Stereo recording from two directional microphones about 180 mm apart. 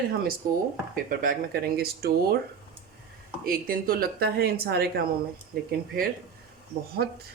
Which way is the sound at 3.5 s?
55° right (ahead or behind).